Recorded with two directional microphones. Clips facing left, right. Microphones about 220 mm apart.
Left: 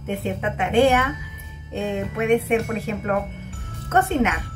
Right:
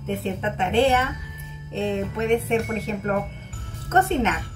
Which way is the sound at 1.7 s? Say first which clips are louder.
Right 1 dB; 10° left (ahead or behind).